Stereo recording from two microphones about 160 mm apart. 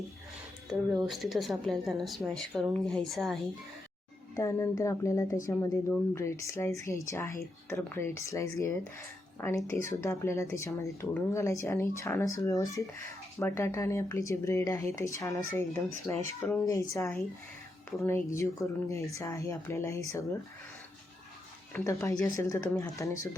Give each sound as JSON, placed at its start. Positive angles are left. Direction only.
{"t": 0.7, "sound": "speech", "side_deg": -5}
{"t": 4.4, "sound": "speech", "side_deg": 20}
{"t": 21.7, "sound": "speech", "side_deg": 20}